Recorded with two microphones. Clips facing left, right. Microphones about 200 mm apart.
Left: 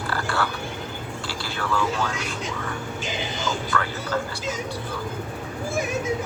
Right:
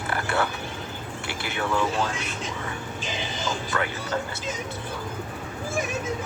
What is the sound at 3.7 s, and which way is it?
Speech, 20° right (ahead or behind).